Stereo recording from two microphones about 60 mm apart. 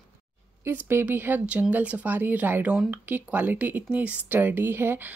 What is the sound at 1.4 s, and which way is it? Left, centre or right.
Speech, right.